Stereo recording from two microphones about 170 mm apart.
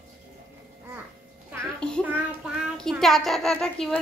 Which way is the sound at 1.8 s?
5° left (ahead or behind).